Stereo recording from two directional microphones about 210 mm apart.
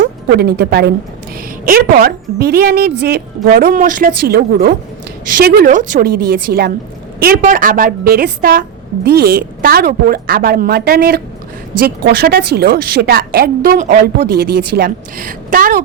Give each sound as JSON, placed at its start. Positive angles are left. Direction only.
{"t": 0.0, "sound": "a woman's voice", "side_deg": -45}